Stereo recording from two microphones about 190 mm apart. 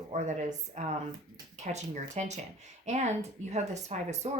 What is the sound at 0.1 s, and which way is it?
Speech, 35° right (ahead or behind).